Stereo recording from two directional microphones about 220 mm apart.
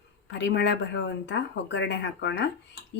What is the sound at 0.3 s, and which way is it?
Speech, 50° left (ahead or behind).